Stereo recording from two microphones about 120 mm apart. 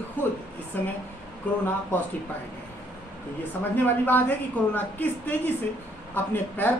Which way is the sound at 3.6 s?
15° left (ahead or behind).